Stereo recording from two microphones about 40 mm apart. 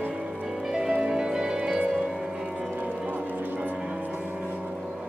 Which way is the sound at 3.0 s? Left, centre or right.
Right.